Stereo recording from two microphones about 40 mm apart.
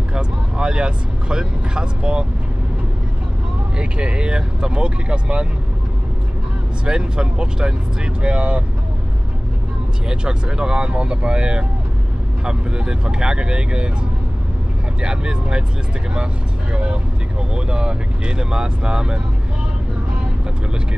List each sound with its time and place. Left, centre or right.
0.1 s vehicle: right
3.7 s speech: right
6.9 s speech: right
10.0 s speech: centre
15.0 s speech: right
16.7 s speech: right